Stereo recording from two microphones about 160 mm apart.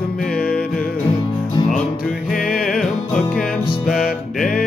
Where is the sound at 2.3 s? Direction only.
Centre (ahead or behind).